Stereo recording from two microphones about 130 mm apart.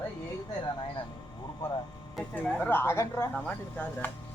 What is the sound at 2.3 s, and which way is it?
Speech, 10° left (ahead or behind).